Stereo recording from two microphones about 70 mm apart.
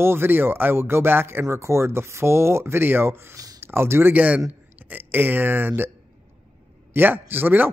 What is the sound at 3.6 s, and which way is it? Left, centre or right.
Speech, right.